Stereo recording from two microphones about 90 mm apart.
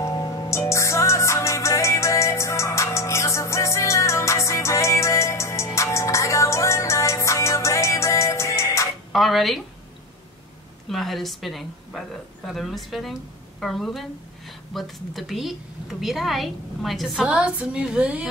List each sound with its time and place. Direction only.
0.0 s music: 50° left (ahead or behind)
0.5 s music: 35° left (ahead or behind)
9.1 s speech: centre (ahead or behind)
10.9 s a woman's voice: centre (ahead or behind); by 18.3 s 15° right (ahead or behind)